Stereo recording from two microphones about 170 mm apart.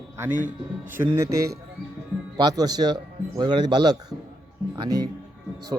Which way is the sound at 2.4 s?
25° right (ahead or behind).